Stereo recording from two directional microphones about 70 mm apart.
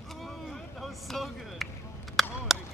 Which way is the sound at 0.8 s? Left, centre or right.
Centre.